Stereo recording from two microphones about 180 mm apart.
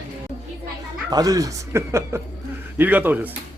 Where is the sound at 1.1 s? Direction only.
20° right (ahead or behind).